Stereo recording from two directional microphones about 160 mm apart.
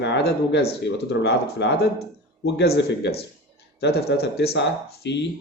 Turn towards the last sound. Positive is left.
turn(degrees=90)